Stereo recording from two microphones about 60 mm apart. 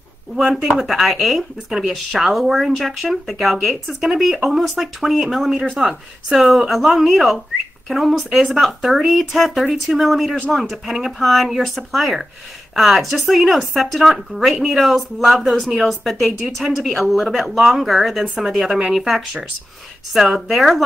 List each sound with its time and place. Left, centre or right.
0.4 s speech: centre
18.2 s speech: centre
18.5 s speech: centre